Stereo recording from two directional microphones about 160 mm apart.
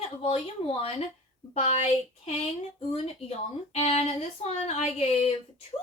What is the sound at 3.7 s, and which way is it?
Speech, 40° left (ahead or behind).